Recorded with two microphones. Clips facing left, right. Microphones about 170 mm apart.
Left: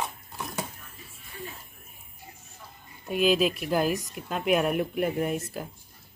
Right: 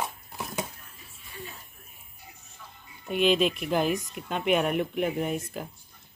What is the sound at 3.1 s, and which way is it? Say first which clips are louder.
A woman's voice: even; centre (ahead or behind).